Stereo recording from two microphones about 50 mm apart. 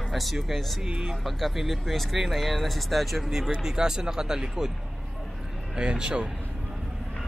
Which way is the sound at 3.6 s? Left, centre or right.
Centre.